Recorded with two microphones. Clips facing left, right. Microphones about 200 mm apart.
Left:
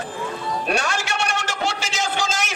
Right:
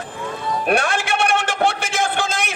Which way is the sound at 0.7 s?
55° right (ahead or behind).